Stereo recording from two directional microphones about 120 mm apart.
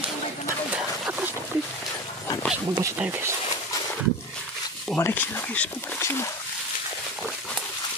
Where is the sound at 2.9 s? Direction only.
15° right (ahead or behind).